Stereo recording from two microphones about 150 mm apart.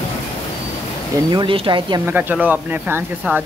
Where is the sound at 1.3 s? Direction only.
35° right (ahead or behind).